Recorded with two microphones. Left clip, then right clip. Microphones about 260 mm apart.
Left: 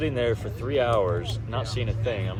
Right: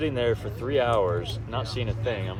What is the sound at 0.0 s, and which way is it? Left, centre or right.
Speech, right.